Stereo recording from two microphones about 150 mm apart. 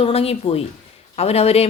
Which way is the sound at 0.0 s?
40° left (ahead or behind).